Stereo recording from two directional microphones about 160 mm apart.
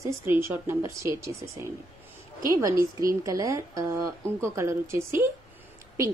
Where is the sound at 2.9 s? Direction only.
20° right (ahead or behind).